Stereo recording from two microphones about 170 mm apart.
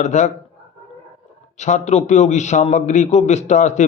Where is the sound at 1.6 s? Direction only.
45° left (ahead or behind).